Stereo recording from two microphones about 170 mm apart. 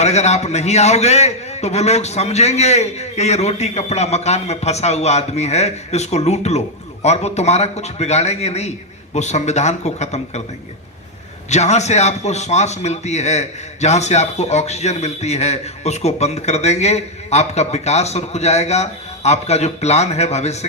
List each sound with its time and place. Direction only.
0.0 s a man's voice: 40° left (ahead or behind)
11.4 s a man's voice: 40° left (ahead or behind)